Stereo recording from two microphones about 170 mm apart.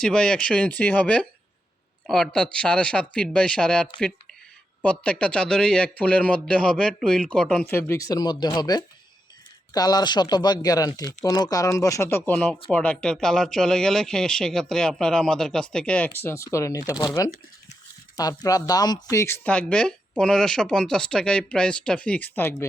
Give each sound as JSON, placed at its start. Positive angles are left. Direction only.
{"t": 0.0, "sound": "speech", "side_deg": 5}
{"t": 7.7, "sound": "speech", "side_deg": 15}